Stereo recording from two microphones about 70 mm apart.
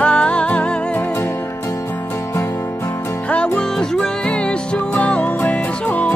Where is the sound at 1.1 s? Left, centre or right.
Left.